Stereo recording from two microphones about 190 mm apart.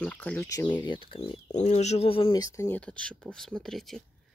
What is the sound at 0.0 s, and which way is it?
Speech, 10° left (ahead or behind).